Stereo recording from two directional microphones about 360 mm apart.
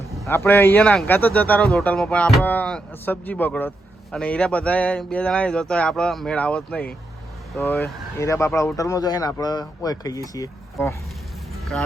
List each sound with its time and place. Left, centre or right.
0.3 s a man's voice: centre